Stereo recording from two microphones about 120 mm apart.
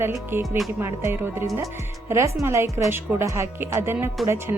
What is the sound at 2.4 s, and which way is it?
A woman's voice, 25° right (ahead or behind).